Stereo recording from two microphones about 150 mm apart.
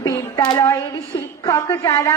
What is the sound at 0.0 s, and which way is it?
Child singing, 25° left (ahead or behind).